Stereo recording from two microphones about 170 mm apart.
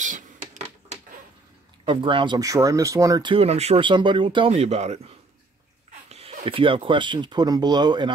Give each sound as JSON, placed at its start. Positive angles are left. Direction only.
{"t": 1.9, "sound": "speech", "side_deg": -30}